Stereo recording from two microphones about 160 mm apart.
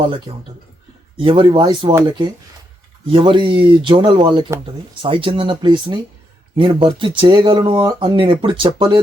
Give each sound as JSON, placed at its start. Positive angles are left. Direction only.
{"t": 1.1, "sound": "speech", "side_deg": -30}
{"t": 3.1, "sound": "speech", "side_deg": -30}